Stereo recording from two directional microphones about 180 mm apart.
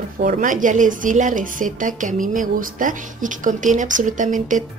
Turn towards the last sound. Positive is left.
turn(degrees=-45)  # may be behind; listen again after turning